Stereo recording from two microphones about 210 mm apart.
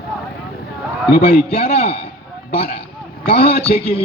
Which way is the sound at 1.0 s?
25° left (ahead or behind).